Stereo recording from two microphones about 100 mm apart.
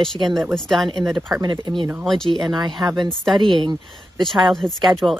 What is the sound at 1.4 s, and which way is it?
Speech, 50° right (ahead or behind).